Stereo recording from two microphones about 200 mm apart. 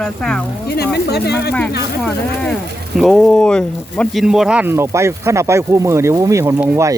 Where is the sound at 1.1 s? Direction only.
55° left (ahead or behind).